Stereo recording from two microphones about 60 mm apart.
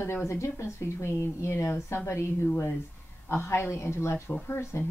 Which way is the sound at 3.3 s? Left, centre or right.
Left.